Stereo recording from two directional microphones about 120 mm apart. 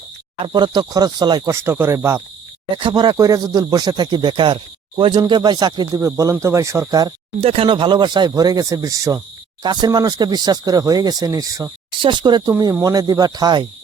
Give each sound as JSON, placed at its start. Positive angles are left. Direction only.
{"t": 0.3, "sound": "speech", "side_deg": -40}
{"t": 1.5, "sound": "cricket", "side_deg": -20}
{"t": 2.7, "sound": "speech", "side_deg": -40}
{"t": 6.4, "sound": "cricket", "side_deg": -25}
{"t": 7.4, "sound": "speech", "side_deg": -50}
{"t": 11.9, "sound": "speech", "side_deg": -40}